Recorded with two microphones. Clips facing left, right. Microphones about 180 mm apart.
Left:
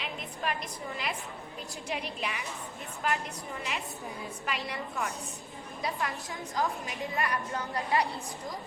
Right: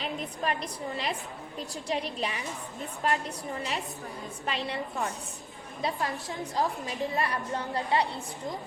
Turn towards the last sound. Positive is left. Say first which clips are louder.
# right 2 dB
turn(degrees=-30)  # may be behind; listen again after turning